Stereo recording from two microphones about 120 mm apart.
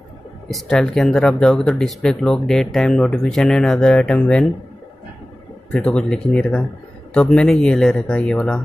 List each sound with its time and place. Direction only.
0.5 s speech: 5° left (ahead or behind)
5.7 s speech: 10° left (ahead or behind)